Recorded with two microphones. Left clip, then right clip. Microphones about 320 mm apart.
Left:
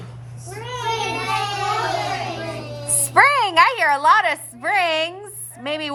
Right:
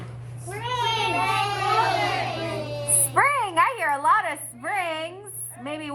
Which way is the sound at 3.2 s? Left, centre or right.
Left.